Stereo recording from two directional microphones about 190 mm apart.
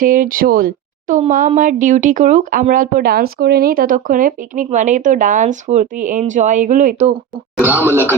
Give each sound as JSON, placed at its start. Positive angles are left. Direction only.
{"t": 0.0, "sound": "speech", "side_deg": -45}
{"t": 7.9, "sound": "speech", "side_deg": -10}